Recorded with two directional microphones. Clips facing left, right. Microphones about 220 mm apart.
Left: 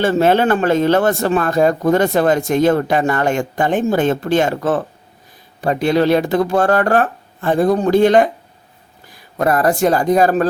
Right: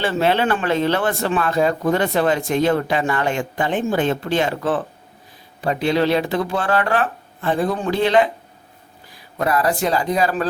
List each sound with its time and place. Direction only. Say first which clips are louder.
0.0 s speech: left 5 dB; 45° left (ahead or behind)
9.4 s speech: left 5 dB; 50° left (ahead or behind)